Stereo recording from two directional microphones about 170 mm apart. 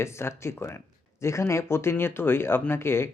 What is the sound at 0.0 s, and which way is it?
Speech, 15° left (ahead or behind).